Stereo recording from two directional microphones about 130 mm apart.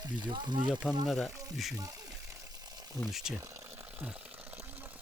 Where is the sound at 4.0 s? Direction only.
10° right (ahead or behind).